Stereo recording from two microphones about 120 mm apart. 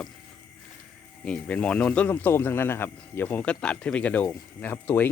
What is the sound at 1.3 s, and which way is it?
Speech, 10° left (ahead or behind).